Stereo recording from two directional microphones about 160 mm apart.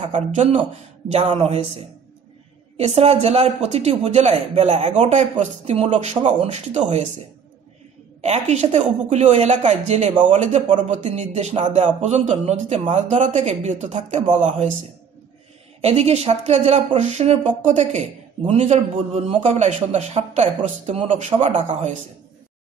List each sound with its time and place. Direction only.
0.0 s speech: 45° right (ahead or behind)
2.8 s speech: 40° right (ahead or behind)
8.2 s speech: 45° right (ahead or behind)
15.8 s speech: 40° right (ahead or behind)